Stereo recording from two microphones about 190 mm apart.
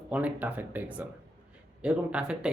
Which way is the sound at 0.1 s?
5° right (ahead or behind).